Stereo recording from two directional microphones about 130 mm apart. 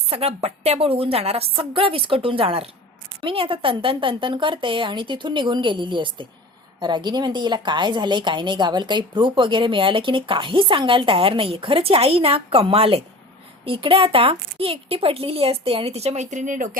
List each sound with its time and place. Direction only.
0.1 s a woman's voice: 50° right (ahead or behind); by 16.6 s 75° right (ahead or behind)